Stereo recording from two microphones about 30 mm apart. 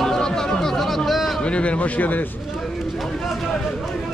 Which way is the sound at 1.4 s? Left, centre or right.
Left.